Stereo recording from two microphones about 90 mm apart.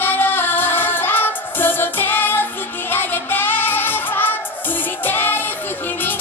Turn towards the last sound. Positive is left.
turn(degrees=20)  # may be behind; listen again after turning